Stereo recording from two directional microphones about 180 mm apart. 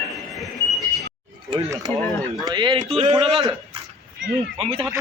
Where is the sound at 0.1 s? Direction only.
Centre (ahead or behind).